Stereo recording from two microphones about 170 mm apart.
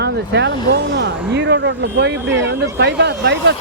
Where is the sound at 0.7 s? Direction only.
75° right (ahead or behind).